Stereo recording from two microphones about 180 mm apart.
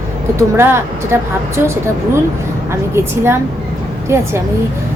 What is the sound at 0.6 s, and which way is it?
Speech, 15° right (ahead or behind).